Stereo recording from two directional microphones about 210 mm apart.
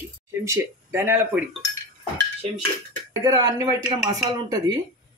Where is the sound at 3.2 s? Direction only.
20° right (ahead or behind).